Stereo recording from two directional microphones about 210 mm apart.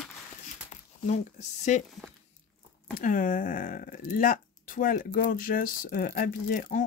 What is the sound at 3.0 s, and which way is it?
Speech, 40° left (ahead or behind).